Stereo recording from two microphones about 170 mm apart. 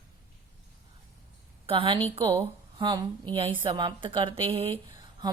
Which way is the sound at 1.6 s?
30° right (ahead or behind).